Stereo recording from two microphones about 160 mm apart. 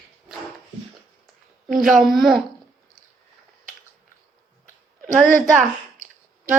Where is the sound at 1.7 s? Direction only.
Centre (ahead or behind).